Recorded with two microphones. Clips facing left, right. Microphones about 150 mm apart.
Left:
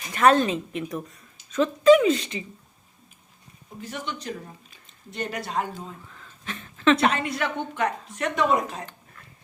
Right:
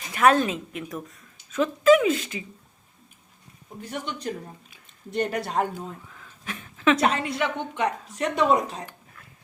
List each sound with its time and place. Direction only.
0.1 s a woman's voice: 5° right (ahead or behind)
3.9 s speech: 50° right (ahead or behind)
5.7 s speech: 5° right (ahead or behind)
7.1 s a woman's voice: 30° right (ahead or behind)
8.4 s speech: 30° right (ahead or behind)